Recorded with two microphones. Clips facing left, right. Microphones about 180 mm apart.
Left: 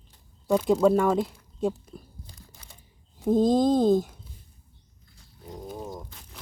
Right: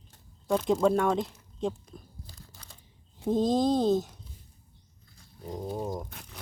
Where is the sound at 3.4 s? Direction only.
50° left (ahead or behind).